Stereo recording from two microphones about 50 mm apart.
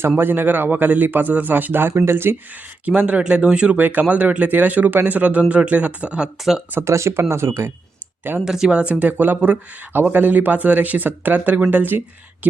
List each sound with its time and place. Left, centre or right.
0.2 s speech: right
1.9 s speech: right
2.8 s speech: right
3.8 s speech: right
6.8 s speech: right
8.4 s speech: centre; by 12.5 s right